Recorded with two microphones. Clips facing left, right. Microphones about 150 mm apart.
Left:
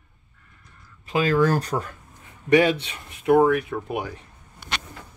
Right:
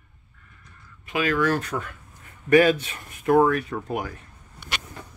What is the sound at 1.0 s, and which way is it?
Speech, 30° left (ahead or behind).